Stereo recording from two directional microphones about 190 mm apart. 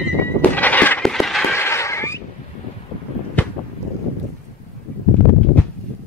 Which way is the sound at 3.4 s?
10° left (ahead or behind).